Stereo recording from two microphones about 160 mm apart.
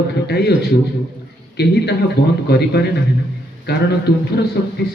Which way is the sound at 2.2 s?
90° left.